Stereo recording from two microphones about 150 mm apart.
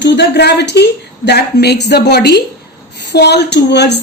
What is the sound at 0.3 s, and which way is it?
A woman's voice, 90° left.